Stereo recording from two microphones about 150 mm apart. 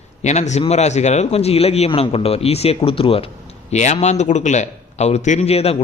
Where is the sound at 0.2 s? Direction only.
50° left (ahead or behind).